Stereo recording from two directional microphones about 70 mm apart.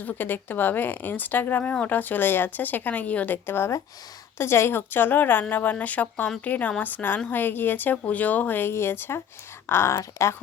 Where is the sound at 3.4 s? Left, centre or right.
Left.